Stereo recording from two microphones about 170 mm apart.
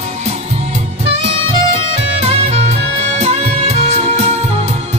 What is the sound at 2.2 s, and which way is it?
Music, 35° right (ahead or behind).